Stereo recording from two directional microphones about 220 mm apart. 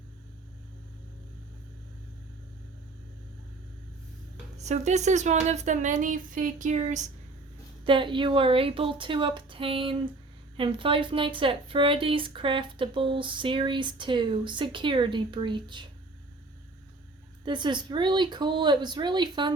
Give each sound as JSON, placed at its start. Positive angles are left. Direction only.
{"t": 4.5, "sound": "a woman's voice", "side_deg": -30}
{"t": 7.9, "sound": "speech", "side_deg": -20}
{"t": 17.4, "sound": "speech", "side_deg": -20}